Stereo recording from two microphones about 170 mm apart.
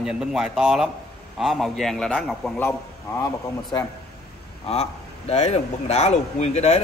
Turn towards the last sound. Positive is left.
turn(degrees=40)  # may be behind; listen again after turning